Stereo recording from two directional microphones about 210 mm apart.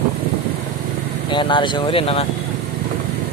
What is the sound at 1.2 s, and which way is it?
Speech, 20° left (ahead or behind).